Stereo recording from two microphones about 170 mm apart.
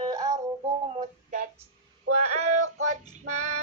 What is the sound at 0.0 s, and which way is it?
Music, 20° right (ahead or behind).